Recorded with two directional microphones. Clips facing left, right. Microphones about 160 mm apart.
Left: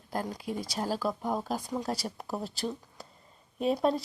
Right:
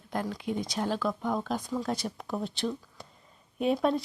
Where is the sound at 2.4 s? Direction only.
5° left (ahead or behind).